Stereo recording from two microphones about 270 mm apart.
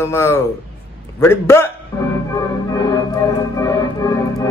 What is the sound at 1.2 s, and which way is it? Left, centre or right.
Music, centre.